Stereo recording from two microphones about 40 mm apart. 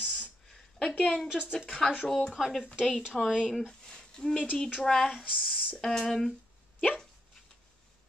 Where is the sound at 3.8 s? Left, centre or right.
Centre.